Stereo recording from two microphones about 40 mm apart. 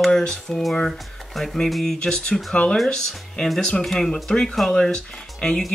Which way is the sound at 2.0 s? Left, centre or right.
Centre.